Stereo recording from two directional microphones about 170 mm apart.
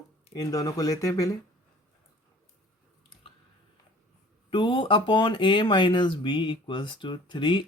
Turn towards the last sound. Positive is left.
turn(degrees=30)  # may be behind; listen again after turning